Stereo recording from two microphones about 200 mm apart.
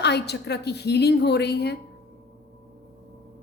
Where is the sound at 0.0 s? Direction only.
55° left (ahead or behind).